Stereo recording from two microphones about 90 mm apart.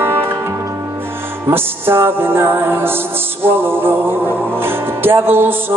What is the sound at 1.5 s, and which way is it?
Music, 25° right (ahead or behind).